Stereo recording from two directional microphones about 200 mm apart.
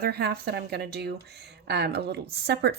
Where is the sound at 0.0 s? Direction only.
50° right (ahead or behind).